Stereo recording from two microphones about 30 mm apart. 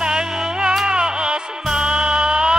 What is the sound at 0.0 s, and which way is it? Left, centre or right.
Music, right.